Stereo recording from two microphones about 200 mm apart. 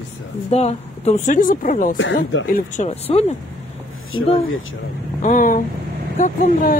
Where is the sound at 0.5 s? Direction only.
35° left (ahead or behind).